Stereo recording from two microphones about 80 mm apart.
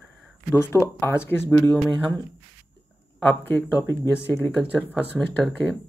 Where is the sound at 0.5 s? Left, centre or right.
Left.